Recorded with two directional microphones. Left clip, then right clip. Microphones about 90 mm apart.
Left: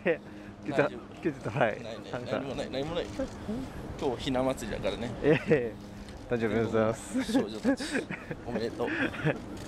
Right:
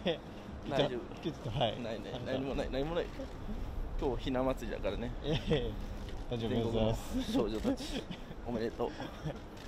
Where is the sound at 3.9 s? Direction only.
15° left (ahead or behind).